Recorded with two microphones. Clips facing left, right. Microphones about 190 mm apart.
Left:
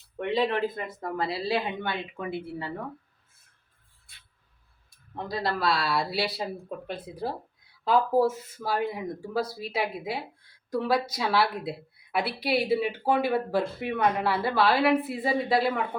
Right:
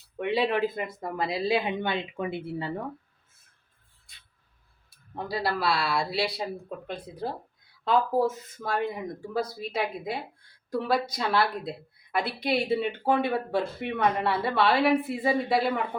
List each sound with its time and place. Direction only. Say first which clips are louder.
0.2 s speech: right 1 dB; 5° right (ahead or behind)
4.9 s a woman's voice: right 1 dB; 5° right (ahead or behind)